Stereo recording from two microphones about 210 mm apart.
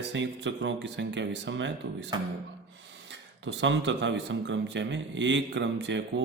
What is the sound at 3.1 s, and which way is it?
Speech, 60° right (ahead or behind).